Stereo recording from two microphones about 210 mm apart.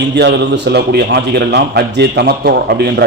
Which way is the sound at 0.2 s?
55° right (ahead or behind).